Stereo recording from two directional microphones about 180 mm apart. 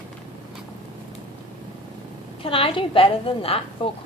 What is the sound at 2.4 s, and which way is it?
A man's voice, 30° left (ahead or behind).